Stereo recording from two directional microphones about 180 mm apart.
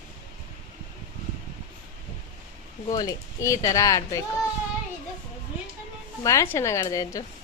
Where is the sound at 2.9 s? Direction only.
20° left (ahead or behind).